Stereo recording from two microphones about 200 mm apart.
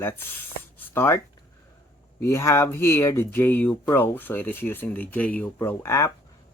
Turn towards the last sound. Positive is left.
turn(degrees=15)  # may be behind; listen again after turning